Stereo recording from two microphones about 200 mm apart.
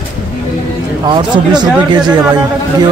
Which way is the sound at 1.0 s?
25° right (ahead or behind).